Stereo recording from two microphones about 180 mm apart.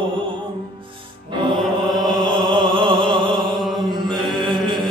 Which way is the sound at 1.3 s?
30° right (ahead or behind).